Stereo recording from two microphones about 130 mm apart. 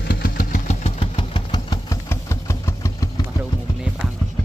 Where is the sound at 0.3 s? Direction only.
80° left.